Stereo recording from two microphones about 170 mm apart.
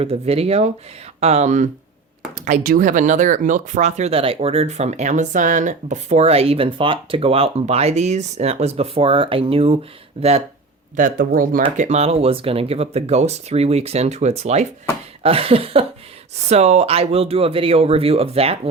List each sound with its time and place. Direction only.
0.0 s speech: 35° right (ahead or behind)
10.9 s speech: 55° right (ahead or behind)
11.8 s speech: 40° right (ahead or behind)